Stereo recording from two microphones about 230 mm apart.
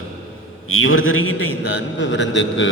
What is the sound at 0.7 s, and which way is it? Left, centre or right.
A man's voice, left.